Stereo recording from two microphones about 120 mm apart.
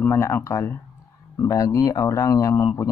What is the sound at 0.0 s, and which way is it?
Speech, 20° left (ahead or behind).